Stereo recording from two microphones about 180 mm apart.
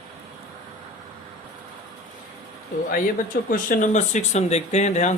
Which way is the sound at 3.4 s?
50° left (ahead or behind).